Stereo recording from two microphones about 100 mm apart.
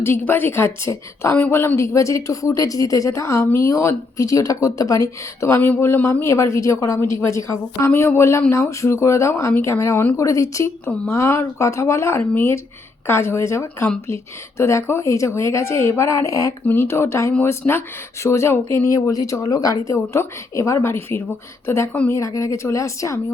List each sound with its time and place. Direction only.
0.0 s a woman's voice: 20° left (ahead or behind)
10.2 s a woman's voice: 35° left (ahead or behind)
16.6 s a woman's voice: 25° left (ahead or behind)